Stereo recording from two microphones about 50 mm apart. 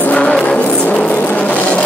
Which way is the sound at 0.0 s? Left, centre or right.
Left.